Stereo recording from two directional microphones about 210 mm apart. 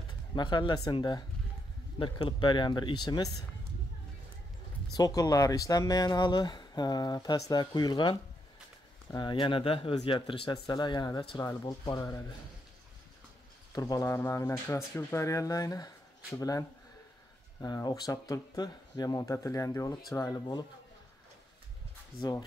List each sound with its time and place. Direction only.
0.4 s speech: 20° left (ahead or behind)
4.9 s speech: 15° left (ahead or behind)
13.7 s speech: 15° left (ahead or behind)